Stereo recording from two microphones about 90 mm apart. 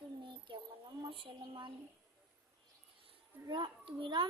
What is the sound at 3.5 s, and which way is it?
Child singing, 60° right (ahead or behind).